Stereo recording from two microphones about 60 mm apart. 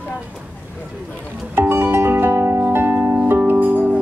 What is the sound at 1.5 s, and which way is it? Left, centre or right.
Music, right.